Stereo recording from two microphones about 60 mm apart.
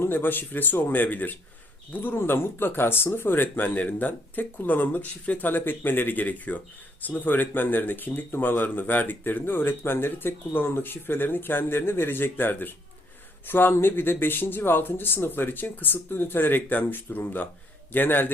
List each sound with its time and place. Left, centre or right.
0.0 s speech: left